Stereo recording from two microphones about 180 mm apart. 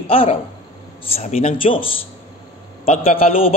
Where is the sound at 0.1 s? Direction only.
30° left (ahead or behind).